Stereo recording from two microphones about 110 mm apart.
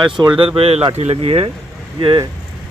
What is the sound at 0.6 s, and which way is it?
Speech, 65° right (ahead or behind).